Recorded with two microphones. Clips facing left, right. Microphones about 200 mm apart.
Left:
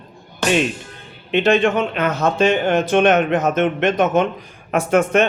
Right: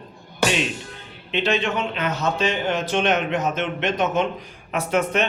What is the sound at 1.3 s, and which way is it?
Speech, 50° left (ahead or behind).